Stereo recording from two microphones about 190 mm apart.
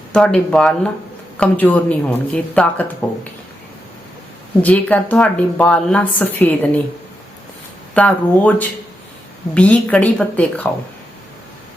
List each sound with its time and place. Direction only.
0.1 s a woman's voice: 5° left (ahead or behind)
4.6 s a woman's voice: 10° left (ahead or behind)
7.9 s a woman's voice: 5° left (ahead or behind)